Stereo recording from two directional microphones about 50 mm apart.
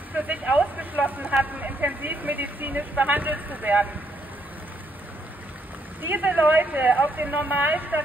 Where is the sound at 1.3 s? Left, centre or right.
Right.